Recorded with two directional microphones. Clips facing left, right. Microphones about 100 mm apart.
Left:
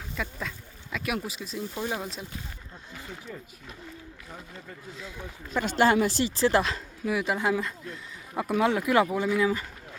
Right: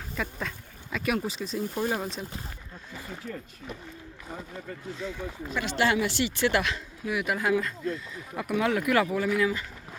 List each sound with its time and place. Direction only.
0.2 s speech: centre (ahead or behind)
3.2 s speech: 5° right (ahead or behind)
5.5 s speech: 40° left (ahead or behind); by 9.6 s 20° left (ahead or behind)